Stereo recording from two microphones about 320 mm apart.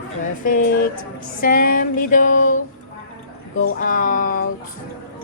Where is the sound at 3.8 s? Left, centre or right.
Left.